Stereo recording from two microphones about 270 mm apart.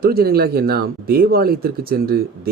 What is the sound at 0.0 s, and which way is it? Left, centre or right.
Speech, right.